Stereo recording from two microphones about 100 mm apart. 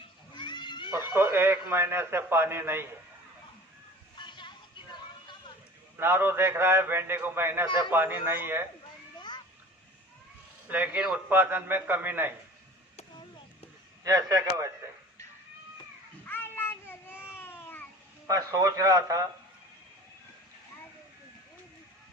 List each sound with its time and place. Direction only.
0.0 s cat: 50° left (ahead or behind)
1.1 s a man's voice: 25° right (ahead or behind)
4.2 s a sound: 50° left (ahead or behind)
6.0 s a man's voice: 25° right (ahead or behind)
10.7 s a man's voice: 15° right (ahead or behind)
14.0 s a man's voice: 40° right (ahead or behind)
16.2 s a sound: 20° left (ahead or behind)
18.3 s a man's voice: 35° right (ahead or behind)